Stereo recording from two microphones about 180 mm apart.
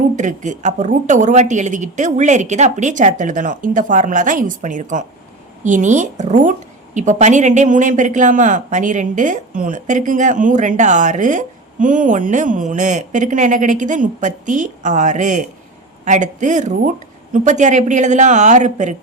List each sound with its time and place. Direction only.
0.2 s speech: 45° right (ahead or behind)